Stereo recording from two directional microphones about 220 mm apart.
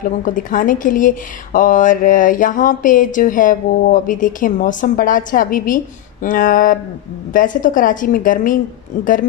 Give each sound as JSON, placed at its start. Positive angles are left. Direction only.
{"t": 0.0, "sound": "speech", "side_deg": 35}